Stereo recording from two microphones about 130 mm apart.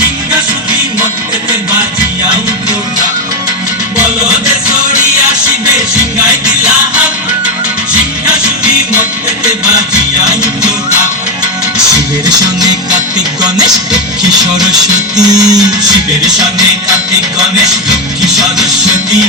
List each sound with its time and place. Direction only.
7.9 s music: 10° right (ahead or behind)
10.2 s music: 5° right (ahead or behind)
14.6 s music: 5° right (ahead or behind)
15.3 s music: 30° right (ahead or behind)